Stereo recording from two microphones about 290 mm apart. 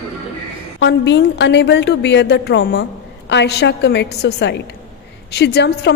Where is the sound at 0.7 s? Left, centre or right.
Left.